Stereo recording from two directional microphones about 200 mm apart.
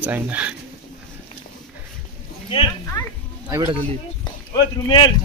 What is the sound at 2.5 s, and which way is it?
Speech, 25° left (ahead or behind).